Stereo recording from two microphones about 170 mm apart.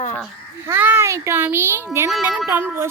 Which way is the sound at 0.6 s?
10° right (ahead or behind).